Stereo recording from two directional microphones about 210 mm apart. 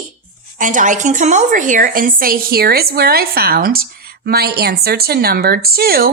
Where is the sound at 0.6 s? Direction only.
40° right (ahead or behind).